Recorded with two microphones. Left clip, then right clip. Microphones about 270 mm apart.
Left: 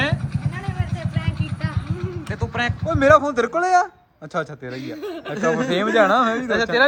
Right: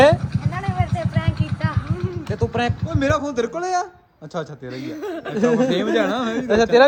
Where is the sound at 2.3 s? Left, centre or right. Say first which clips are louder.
Right 2 dB; right.